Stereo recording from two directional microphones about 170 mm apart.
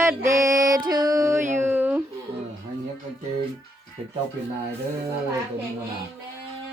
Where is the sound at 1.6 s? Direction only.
10° right (ahead or behind).